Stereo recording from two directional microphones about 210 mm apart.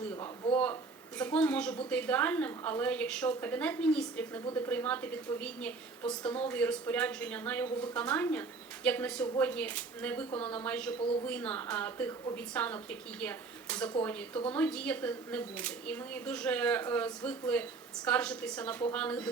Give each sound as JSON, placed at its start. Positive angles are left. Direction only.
{"t": 0.5, "sound": "a woman's voice", "side_deg": 5}
{"t": 11.0, "sound": "a woman's voice", "side_deg": 25}
{"t": 11.3, "sound": "a woman's voice", "side_deg": 5}